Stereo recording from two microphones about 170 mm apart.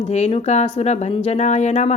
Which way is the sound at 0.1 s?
40° left (ahead or behind).